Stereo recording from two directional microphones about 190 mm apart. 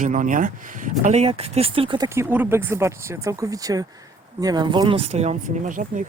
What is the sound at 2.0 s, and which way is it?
Speech, 10° right (ahead or behind).